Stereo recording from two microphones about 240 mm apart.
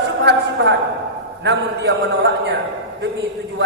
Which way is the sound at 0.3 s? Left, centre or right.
Right.